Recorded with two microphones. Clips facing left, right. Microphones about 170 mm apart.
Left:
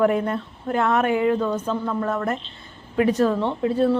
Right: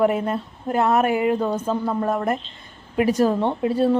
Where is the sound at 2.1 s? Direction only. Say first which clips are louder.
Right 2 dB; 10° right (ahead or behind).